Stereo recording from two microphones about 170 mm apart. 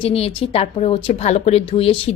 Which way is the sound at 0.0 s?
35° left (ahead or behind).